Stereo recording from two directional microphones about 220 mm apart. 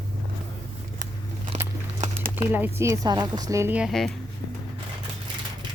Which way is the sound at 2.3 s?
10° right (ahead or behind).